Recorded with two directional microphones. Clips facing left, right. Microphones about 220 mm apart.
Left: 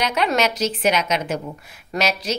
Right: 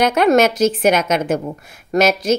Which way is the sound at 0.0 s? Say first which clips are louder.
Right 8 dB; 50° right (ahead or behind).